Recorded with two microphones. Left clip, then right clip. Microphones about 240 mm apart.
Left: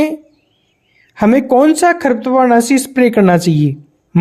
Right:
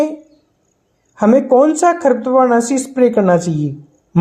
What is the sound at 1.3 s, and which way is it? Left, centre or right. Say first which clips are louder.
Speech: even; left.